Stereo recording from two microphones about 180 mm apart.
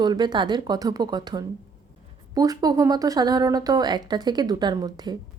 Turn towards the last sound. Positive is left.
turn(degrees=-25)  # may be behind; listen again after turning